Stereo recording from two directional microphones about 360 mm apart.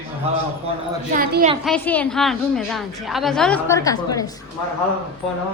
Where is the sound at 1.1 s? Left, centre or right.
Right.